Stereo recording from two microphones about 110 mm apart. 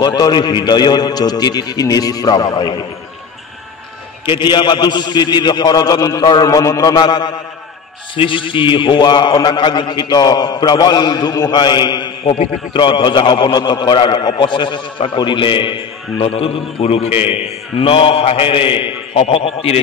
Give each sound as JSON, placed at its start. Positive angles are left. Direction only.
{"t": 0.0, "sound": "a man's voice", "side_deg": 40}
{"t": 4.3, "sound": "a man's voice", "side_deg": 45}
{"t": 8.2, "sound": "a man's voice", "side_deg": 50}